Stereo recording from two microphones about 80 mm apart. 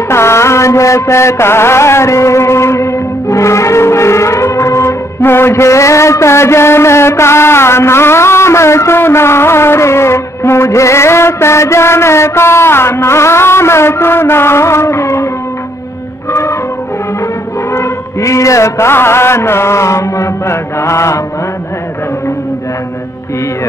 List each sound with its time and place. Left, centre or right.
0.1 s mantra: left
16.3 s music: left
17.7 s mantra: left